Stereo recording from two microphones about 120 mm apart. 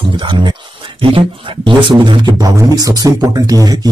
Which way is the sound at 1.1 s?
45° right (ahead or behind).